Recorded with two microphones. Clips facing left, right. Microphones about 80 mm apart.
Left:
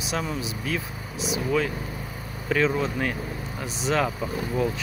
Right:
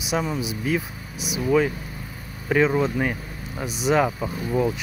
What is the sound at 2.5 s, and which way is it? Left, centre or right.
Speech, centre.